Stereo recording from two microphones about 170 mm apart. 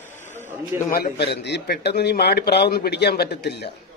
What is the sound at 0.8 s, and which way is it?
A man's voice, 60° left (ahead or behind).